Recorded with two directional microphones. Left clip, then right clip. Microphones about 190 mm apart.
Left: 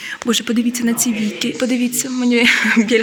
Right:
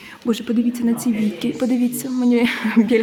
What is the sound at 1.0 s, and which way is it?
Speech, 10° right (ahead or behind).